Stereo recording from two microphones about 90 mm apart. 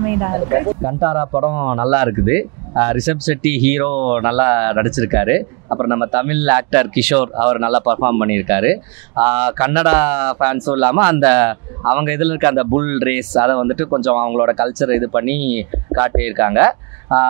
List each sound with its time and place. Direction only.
0.0 s speech: 25° right (ahead or behind)